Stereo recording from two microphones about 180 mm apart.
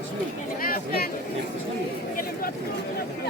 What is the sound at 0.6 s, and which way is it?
Chatter, 55° left (ahead or behind).